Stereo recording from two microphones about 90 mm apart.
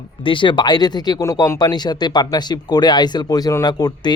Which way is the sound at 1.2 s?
35° left (ahead or behind).